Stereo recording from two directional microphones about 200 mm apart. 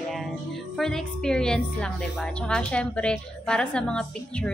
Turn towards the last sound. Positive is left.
turn(degrees=5)  # may be behind; listen again after turning